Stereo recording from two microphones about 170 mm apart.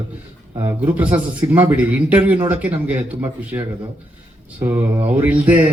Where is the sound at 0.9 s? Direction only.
10° right (ahead or behind).